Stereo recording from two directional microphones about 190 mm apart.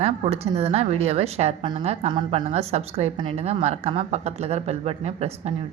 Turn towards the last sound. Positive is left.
turn(degrees=-35)  # may be behind; listen again after turning